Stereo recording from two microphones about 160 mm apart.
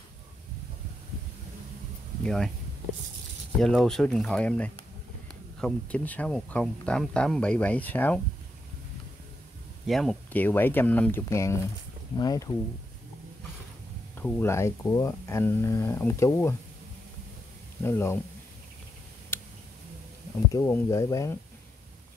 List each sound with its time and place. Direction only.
2.2 s speech: 5° left (ahead or behind)
3.5 s speech: 5° left (ahead or behind)
9.8 s speech: centre (ahead or behind); by 12.4 s 25° left (ahead or behind)
14.1 s speech: 15° left (ahead or behind)
17.8 s speech: 15° left (ahead or behind)
20.5 s speech: 15° left (ahead or behind)